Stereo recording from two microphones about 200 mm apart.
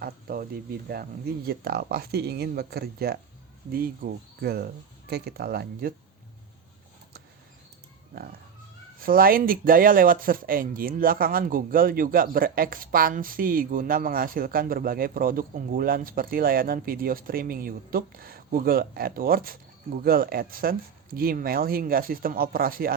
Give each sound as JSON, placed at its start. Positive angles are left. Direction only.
{"t": 0.0, "sound": "speech", "side_deg": -50}
{"t": 9.0, "sound": "speech", "side_deg": -45}